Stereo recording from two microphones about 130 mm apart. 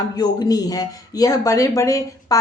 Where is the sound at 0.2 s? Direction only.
30° left (ahead or behind).